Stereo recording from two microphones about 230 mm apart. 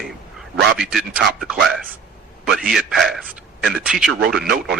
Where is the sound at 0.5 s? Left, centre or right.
Right.